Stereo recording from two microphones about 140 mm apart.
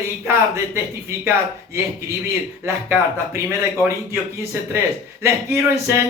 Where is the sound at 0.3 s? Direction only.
20° right (ahead or behind).